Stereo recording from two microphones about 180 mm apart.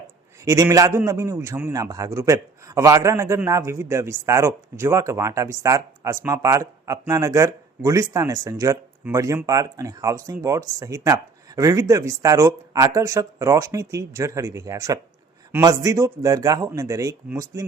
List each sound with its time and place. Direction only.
0.4 s a man's voice: 20° right (ahead or behind)